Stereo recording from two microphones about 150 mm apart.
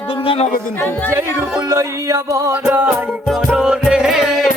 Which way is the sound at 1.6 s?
20° right (ahead or behind).